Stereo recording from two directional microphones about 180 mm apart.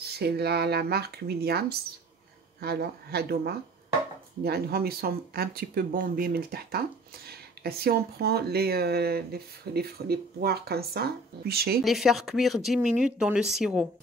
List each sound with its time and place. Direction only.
0.0 s speech: 65° right (ahead or behind)
11.8 s speech: centre (ahead or behind)